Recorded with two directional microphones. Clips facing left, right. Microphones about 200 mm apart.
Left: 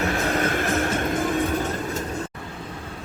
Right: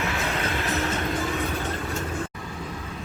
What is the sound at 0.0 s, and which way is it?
Music, 45° left (ahead or behind).